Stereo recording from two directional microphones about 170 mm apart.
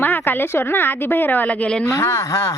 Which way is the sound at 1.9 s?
15° left (ahead or behind).